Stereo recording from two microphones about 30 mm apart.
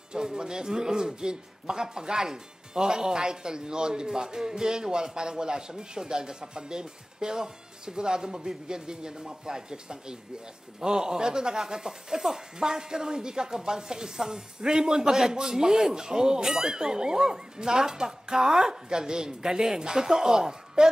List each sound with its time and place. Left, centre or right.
0.1 s a man's voice: right
15.6 s a man's voice: right